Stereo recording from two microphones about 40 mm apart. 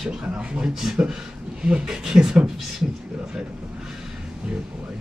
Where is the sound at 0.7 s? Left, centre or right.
Centre.